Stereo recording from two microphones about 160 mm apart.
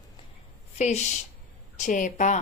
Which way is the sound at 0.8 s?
45° left (ahead or behind).